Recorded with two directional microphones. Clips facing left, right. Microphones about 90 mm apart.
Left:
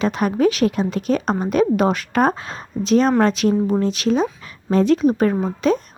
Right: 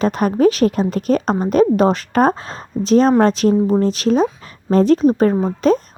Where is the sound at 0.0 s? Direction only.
40° right (ahead or behind).